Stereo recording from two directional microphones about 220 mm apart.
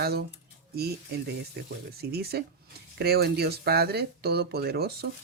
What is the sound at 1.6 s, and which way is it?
Speech, 45° right (ahead or behind).